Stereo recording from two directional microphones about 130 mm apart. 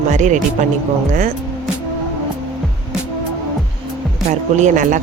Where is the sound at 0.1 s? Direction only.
70° right (ahead or behind).